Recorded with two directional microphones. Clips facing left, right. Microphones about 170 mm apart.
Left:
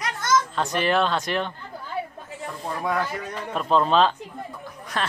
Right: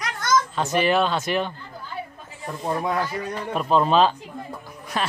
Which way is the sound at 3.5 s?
10° right (ahead or behind).